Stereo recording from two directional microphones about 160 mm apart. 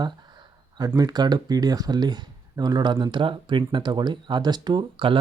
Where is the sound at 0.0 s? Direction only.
25° right (ahead or behind).